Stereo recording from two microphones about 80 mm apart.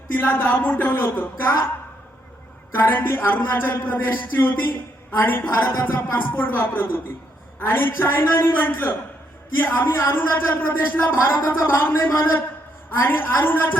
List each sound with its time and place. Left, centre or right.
0.1 s speech: centre
2.7 s speech: left